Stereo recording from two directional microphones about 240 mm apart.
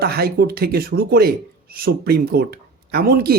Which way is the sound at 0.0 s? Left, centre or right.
Right.